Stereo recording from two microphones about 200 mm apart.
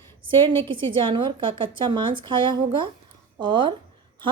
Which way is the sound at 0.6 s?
25° right (ahead or behind).